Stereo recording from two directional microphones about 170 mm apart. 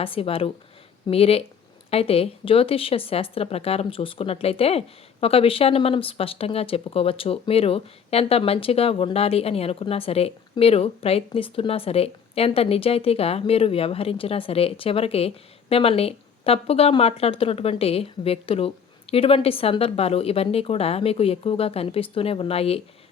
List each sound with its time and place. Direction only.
0.0 s speech: 35° left (ahead or behind)